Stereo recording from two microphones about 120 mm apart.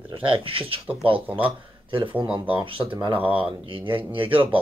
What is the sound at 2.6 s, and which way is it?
Speech, 40° right (ahead or behind).